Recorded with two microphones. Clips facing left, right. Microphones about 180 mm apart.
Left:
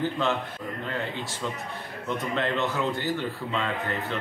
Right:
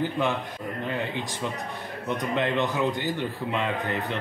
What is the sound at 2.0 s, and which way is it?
Speech, 15° right (ahead or behind).